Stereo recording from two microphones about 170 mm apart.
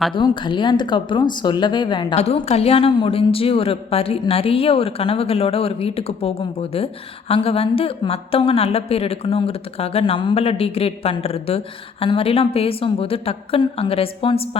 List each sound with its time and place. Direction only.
0.1 s speech: 25° left (ahead or behind)
2.1 s a woman's voice: 40° left (ahead or behind)